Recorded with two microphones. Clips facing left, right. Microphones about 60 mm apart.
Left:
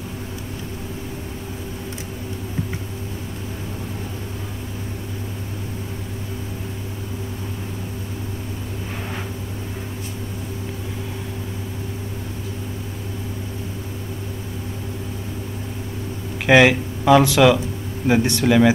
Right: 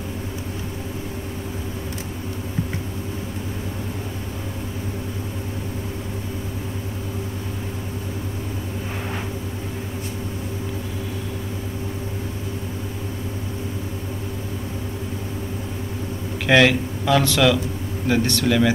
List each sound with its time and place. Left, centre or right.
16.4 s speech: centre